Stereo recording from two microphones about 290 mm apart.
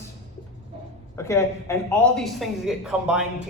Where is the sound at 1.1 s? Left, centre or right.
Centre.